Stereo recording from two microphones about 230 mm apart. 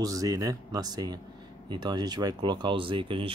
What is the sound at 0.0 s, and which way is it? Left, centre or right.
Speech, centre.